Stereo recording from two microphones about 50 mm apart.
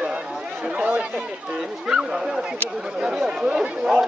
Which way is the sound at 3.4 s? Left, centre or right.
Centre.